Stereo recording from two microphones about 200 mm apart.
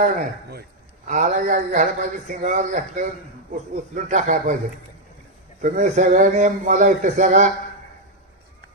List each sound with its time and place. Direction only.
0.0 s a man's voice: 40° right (ahead or behind)
5.6 s a man's voice: 40° right (ahead or behind)